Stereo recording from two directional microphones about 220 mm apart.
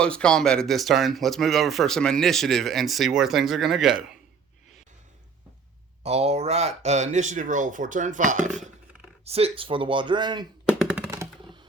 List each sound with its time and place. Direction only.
0.0 s speech: 5° left (ahead or behind)
6.0 s speech: 30° right (ahead or behind)
10.7 s a sound: centre (ahead or behind)
11.1 s typing: 15° right (ahead or behind)